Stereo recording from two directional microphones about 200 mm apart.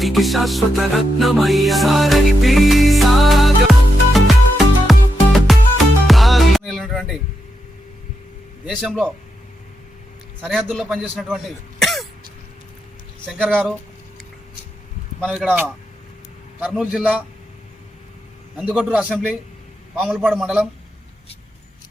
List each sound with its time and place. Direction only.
0.0 s music: centre (ahead or behind)
8.7 s a man's voice: centre (ahead or behind)
10.4 s a man's voice: 5° right (ahead or behind)
11.8 s throat clearing: centre (ahead or behind)
13.2 s a man's voice: 10° right (ahead or behind)
15.2 s a man's voice: centre (ahead or behind)
18.5 s a man's voice: 5° right (ahead or behind)